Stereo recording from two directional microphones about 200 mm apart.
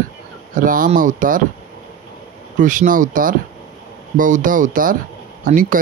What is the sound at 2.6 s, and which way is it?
Speech, 40° right (ahead or behind).